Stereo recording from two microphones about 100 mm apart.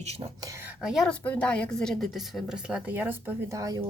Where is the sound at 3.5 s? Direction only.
35° right (ahead or behind).